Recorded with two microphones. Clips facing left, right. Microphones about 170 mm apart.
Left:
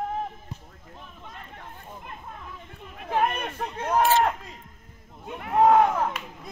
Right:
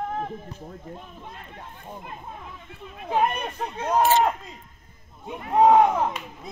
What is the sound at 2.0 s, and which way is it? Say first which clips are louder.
Speech: right 2 dB; 15° right (ahead or behind).